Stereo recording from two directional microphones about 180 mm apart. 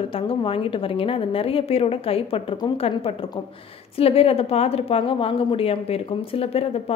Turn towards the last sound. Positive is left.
turn(degrees=35)  # may be behind; listen again after turning